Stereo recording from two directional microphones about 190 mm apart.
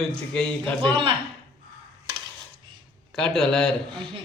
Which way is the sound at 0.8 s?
25° right (ahead or behind).